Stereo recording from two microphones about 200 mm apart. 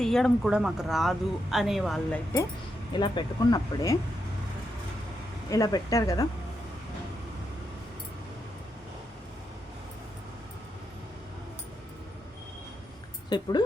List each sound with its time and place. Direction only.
0.0 s speech: centre (ahead or behind)
2.9 s speech: 20° left (ahead or behind)
5.5 s speech: 20° left (ahead or behind)
13.3 s speech: 20° left (ahead or behind)